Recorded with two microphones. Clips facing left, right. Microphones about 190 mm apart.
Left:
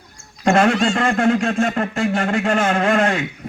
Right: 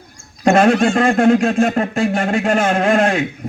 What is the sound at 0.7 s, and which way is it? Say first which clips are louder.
Speech: right 4 dB; 55° right (ahead or behind).